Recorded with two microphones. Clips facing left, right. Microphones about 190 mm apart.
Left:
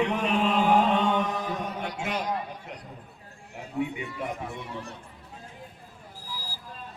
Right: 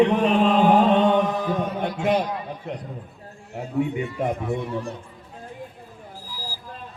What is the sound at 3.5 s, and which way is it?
Speech, 45° right (ahead or behind).